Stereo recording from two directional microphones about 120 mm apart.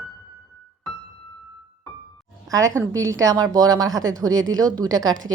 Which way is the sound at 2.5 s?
25° right (ahead or behind).